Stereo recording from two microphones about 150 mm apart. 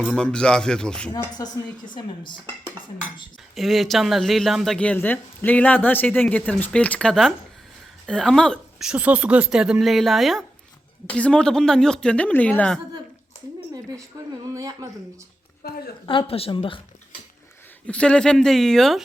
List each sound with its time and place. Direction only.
0.0 s speech: centre (ahead or behind)
1.1 s speech: 20° left (ahead or behind)
1.9 s speech: 30° left (ahead or behind)
3.5 s speech: centre (ahead or behind)
14.4 s speech: 25° right (ahead or behind)
15.6 s a woman's voice: 90° left
16.0 s speech: 35° left (ahead or behind)
17.8 s speech: 5° left (ahead or behind)